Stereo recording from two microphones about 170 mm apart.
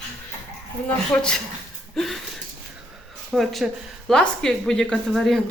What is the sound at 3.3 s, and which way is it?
A woman's voice, centre (ahead or behind).